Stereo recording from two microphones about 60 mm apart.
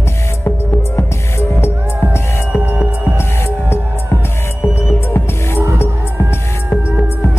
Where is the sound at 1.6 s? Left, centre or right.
Left.